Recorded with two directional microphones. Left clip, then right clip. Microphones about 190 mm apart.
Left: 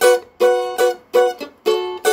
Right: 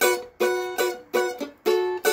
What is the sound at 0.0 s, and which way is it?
Music, 10° right (ahead or behind).